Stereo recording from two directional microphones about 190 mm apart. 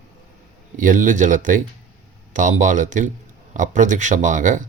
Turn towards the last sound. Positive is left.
turn(degrees=-40)  # may be behind; listen again after turning